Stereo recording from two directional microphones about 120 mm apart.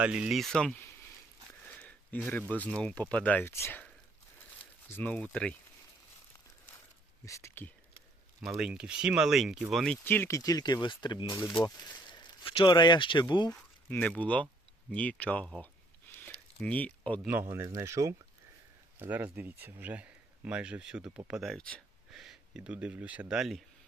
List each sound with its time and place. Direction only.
0.0 s speech: 10° right (ahead or behind)
1.6 s a sound: 10° left (ahead or behind)
2.5 s speech: 10° left (ahead or behind)
7.3 s speech: 25° left (ahead or behind)
8.4 s speech: 5° right (ahead or behind)
10.0 s speech: 15° left (ahead or behind); by 13.6 s 35° left (ahead or behind)
14.0 s speech: 10° left (ahead or behind)
16.2 s a sound: 15° left (ahead or behind)
17.2 s speech: 20° right (ahead or behind); by 23.6 s centre (ahead or behind)